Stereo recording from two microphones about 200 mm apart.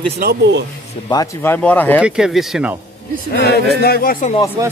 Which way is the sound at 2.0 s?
5° right (ahead or behind).